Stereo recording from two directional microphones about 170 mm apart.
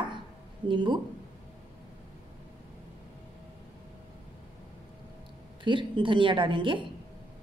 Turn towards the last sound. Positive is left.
turn(degrees=-30)  # may be behind; listen again after turning